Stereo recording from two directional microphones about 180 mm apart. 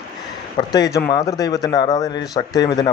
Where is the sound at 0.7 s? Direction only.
20° left (ahead or behind).